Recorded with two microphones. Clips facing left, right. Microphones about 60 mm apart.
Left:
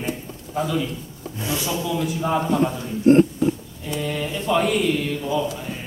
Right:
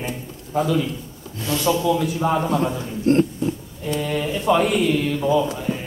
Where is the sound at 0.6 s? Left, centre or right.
Centre.